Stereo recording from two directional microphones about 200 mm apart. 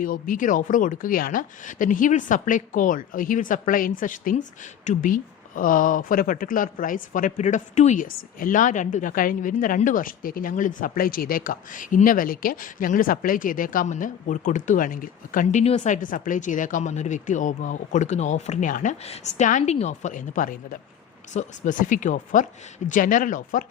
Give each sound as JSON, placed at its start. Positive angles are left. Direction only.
{"t": 0.0, "sound": "speech", "side_deg": 45}